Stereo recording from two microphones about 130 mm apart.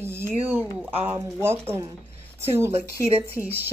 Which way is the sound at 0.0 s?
20° right (ahead or behind).